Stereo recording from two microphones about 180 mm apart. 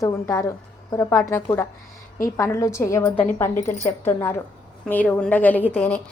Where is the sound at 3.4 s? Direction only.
15° left (ahead or behind).